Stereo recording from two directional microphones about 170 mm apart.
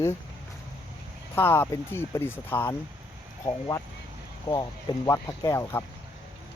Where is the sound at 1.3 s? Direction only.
10° left (ahead or behind).